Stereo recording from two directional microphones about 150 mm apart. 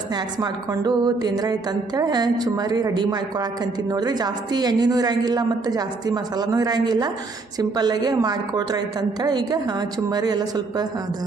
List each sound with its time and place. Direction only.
0.1 s a woman's voice: 30° right (ahead or behind)